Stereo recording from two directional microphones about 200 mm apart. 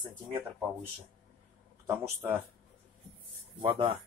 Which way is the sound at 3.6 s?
25° right (ahead or behind).